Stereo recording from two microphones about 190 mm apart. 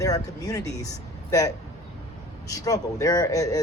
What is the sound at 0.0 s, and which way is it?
Speech, 15° left (ahead or behind).